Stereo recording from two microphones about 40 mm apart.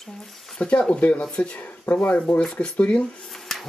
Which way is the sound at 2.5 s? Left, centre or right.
Left.